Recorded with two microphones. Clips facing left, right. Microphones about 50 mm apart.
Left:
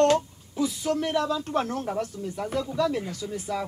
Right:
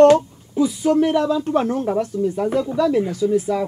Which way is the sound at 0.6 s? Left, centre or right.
Centre.